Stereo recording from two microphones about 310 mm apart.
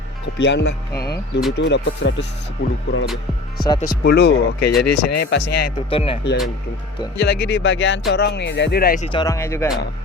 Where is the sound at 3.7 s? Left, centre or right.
Centre.